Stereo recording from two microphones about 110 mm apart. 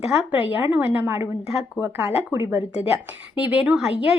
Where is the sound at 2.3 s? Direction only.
20° right (ahead or behind).